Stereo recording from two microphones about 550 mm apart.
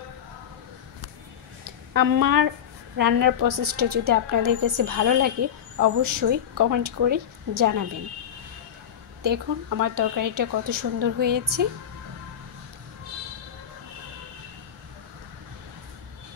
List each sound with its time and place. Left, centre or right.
2.0 s speech: right
9.2 s speech: right